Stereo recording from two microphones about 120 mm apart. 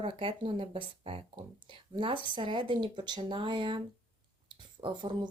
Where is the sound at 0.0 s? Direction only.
45° right (ahead or behind).